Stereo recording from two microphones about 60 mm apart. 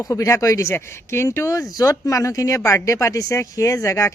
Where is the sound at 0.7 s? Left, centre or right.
Left.